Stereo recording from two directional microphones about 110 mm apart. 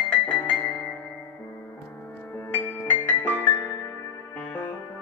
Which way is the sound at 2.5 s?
20° left (ahead or behind).